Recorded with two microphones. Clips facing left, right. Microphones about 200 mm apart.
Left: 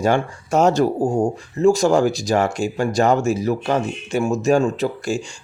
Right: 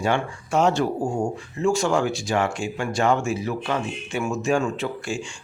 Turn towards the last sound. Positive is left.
turn(degrees=40)  # may be behind; listen again after turning